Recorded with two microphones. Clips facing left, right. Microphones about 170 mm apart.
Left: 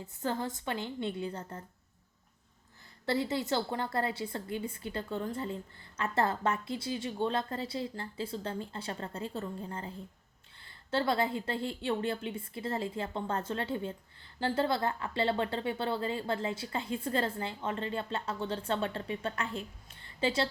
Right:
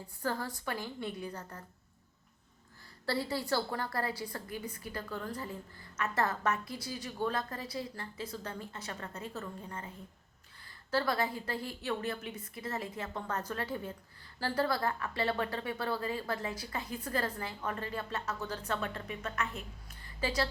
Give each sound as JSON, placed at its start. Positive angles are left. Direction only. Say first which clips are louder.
{"t": 0.0, "sound": "a woman's voice", "louder": "left 2 dB", "side_deg": 20}
{"t": 3.1, "sound": "a woman's voice", "louder": "left 2 dB", "side_deg": 20}
{"t": 10.9, "sound": "a woman's voice", "louder": "left 2 dB", "side_deg": 25}